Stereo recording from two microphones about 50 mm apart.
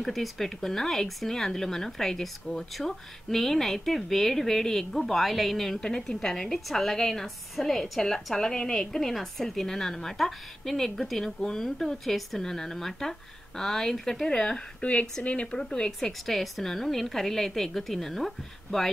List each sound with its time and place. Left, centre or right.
0.0 s a woman's voice: centre